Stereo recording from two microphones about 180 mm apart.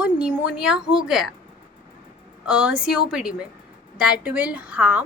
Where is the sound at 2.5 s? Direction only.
5° right (ahead or behind).